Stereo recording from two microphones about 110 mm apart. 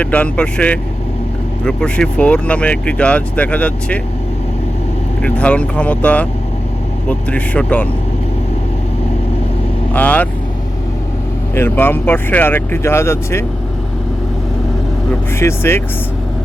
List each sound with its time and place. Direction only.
0.0 s speech: 15° left (ahead or behind)
5.2 s speech: 10° left (ahead or behind)
9.9 s speech: 15° left (ahead or behind)
11.5 s speech: 20° left (ahead or behind)
15.4 s speech: 25° left (ahead or behind)